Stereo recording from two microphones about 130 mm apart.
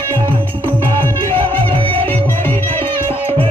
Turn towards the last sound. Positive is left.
turn(degrees=-45)  # may be behind; listen again after turning